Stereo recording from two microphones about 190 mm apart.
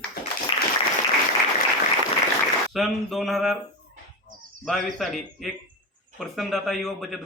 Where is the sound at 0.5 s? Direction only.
30° left (ahead or behind).